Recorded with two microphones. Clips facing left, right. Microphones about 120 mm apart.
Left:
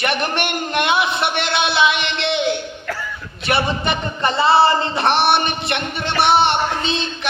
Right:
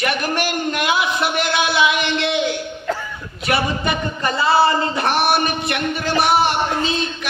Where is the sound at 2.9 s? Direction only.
20° right (ahead or behind).